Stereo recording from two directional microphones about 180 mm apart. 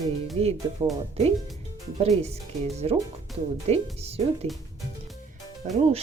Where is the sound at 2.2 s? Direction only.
35° right (ahead or behind).